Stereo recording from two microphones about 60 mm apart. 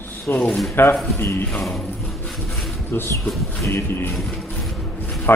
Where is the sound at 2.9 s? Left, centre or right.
Left.